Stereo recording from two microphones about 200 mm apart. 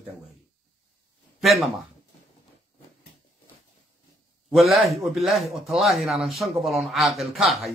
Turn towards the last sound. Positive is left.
turn(degrees=0)  # may be behind; listen again after turning